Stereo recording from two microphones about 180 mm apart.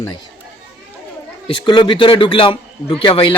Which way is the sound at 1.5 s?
25° left (ahead or behind).